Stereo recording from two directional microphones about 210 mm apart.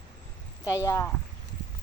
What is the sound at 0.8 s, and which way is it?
Speech, 15° left (ahead or behind).